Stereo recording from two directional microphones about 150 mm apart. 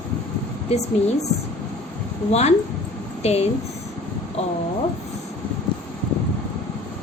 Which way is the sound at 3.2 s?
45° left (ahead or behind).